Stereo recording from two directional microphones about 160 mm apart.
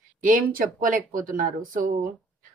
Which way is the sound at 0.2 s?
60° right (ahead or behind).